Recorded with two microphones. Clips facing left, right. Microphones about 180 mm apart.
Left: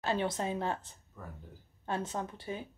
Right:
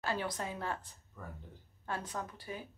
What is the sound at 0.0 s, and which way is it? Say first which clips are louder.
A woman's voice: left 5 dB; 25° left (ahead or behind).